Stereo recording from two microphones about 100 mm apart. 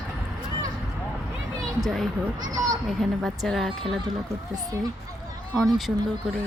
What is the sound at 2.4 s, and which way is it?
Children playing, 40° right (ahead or behind).